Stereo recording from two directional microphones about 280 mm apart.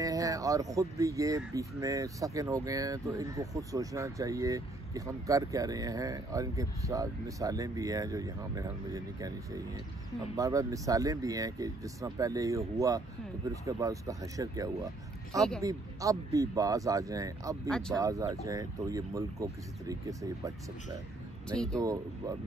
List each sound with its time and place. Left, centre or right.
0.0 s speech: centre
10.3 s speech: centre
17.6 s speech: centre
17.9 s speech: centre
21.5 s speech: centre
21.7 s speech: centre